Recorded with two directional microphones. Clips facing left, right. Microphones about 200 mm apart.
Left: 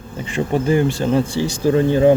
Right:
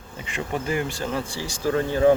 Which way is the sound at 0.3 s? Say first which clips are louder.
Left 9 dB; 30° left (ahead or behind).